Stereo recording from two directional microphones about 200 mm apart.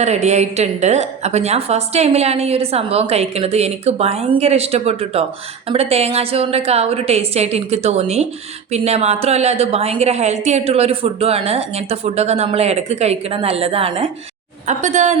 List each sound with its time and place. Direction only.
0.0 s a woman's voice: 35° right (ahead or behind)